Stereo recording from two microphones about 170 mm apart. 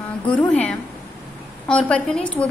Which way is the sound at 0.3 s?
10° left (ahead or behind).